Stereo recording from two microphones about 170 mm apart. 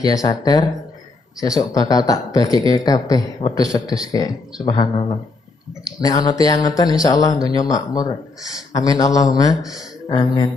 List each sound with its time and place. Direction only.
0.0 s speech: 20° left (ahead or behind)